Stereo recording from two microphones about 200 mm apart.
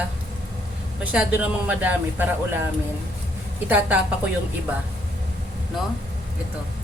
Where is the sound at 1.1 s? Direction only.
5° right (ahead or behind).